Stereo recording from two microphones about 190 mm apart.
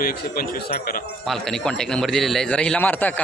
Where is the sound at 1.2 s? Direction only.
Centre (ahead or behind).